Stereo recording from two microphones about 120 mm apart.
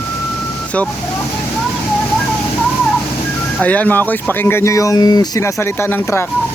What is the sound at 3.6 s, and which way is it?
Speech, 10° left (ahead or behind).